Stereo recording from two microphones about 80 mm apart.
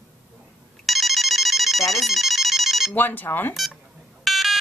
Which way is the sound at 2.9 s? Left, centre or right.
Left.